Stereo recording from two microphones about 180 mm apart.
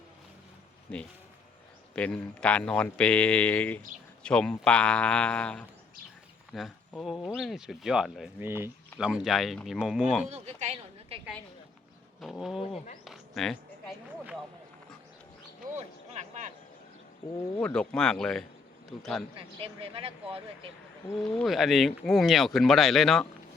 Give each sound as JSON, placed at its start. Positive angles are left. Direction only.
{"t": 0.9, "sound": "speech", "side_deg": 5}
{"t": 8.4, "sound": "speech", "side_deg": -15}
{"t": 10.2, "sound": "a sound", "side_deg": -40}
{"t": 12.2, "sound": "speech", "side_deg": 0}
{"t": 13.1, "sound": "a sound", "side_deg": 0}
{"t": 16.1, "sound": "a sound", "side_deg": -40}
{"t": 17.6, "sound": "speech", "side_deg": 5}
{"t": 19.4, "sound": "speech", "side_deg": -30}
{"t": 21.3, "sound": "speech", "side_deg": 0}